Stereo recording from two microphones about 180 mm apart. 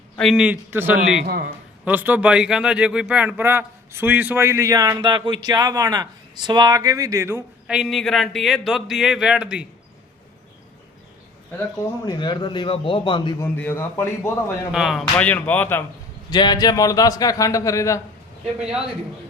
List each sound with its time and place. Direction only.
0.2 s a man's voice: centre (ahead or behind)
1.2 s a man's voice: 55° right (ahead or behind)
1.8 s a man's voice: 10° right (ahead or behind)
7.8 s a man's voice: centre (ahead or behind)
12.0 s a man's voice: 25° left (ahead or behind)
13.4 s a man's voice: 10° left (ahead or behind)
14.7 s a man's voice: centre (ahead or behind)
16.3 s a man's voice: 25° left (ahead or behind)